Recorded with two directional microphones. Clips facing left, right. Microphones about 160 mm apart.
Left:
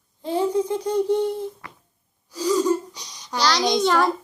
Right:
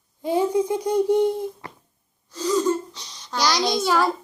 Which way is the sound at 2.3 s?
10° left (ahead or behind).